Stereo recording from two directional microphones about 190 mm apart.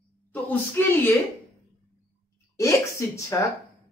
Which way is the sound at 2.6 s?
15° left (ahead or behind).